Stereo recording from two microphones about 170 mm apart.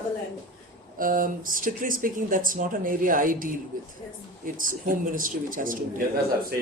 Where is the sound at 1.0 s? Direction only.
55° right (ahead or behind).